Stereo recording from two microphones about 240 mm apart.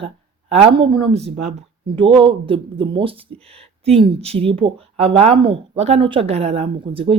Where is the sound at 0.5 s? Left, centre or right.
Right.